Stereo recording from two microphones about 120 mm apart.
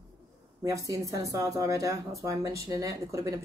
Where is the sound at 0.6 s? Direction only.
25° right (ahead or behind).